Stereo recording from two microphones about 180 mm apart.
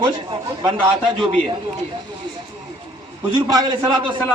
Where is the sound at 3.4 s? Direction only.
20° right (ahead or behind).